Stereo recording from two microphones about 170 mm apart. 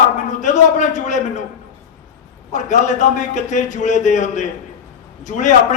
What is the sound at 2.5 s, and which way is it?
A man's voice, 45° left (ahead or behind).